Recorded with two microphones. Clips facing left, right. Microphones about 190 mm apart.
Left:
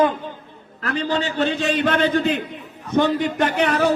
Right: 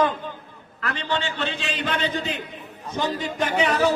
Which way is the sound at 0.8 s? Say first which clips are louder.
Left 5 dB; 40° left (ahead or behind).